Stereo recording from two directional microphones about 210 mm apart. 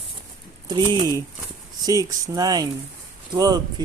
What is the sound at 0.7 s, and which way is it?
Speech, 20° right (ahead or behind).